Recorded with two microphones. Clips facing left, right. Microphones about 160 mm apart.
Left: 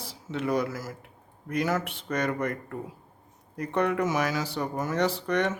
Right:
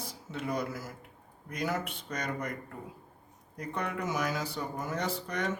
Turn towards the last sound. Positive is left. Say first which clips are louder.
# left 8 dB
turn(degrees=80)